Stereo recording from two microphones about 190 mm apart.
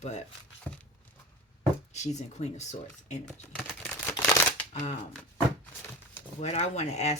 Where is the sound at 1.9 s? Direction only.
35° left (ahead or behind).